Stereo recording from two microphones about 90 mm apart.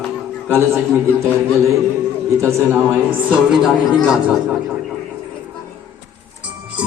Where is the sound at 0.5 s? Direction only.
30° right (ahead or behind).